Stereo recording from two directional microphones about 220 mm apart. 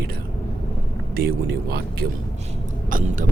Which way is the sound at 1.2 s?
45° right (ahead or behind).